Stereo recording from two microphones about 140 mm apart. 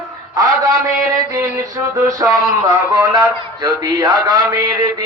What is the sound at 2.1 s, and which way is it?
Speech, 25° right (ahead or behind).